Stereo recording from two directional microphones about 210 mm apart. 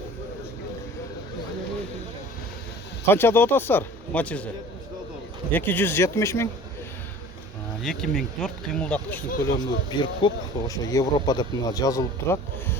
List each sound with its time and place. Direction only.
3.1 s speech: 10° left (ahead or behind)
5.5 s speech: 10° left (ahead or behind)
7.8 s speech: centre (ahead or behind)